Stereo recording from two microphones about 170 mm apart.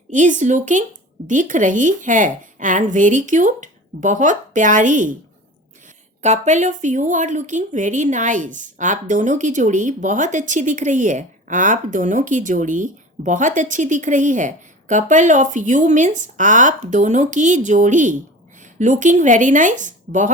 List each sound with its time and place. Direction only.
0.1 s a woman's voice: 50° right (ahead or behind)
6.2 s a woman's voice: 45° right (ahead or behind)